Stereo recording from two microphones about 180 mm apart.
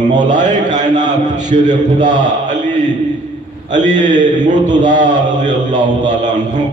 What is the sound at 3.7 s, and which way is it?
A man's voice, 45° right (ahead or behind).